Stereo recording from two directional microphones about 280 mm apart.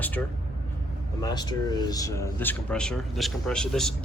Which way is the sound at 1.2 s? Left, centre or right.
Centre.